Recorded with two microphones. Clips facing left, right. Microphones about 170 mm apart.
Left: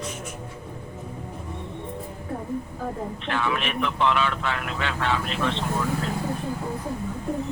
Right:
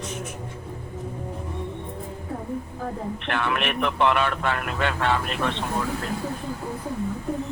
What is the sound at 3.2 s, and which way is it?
Speech, 60° right (ahead or behind).